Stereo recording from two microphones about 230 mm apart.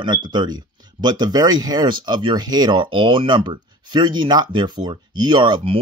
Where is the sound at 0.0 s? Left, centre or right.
Centre.